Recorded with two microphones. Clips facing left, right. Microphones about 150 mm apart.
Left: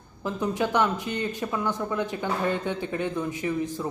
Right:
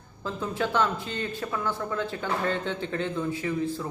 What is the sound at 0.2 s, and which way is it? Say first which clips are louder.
Speech: left 3 dB; 15° left (ahead or behind).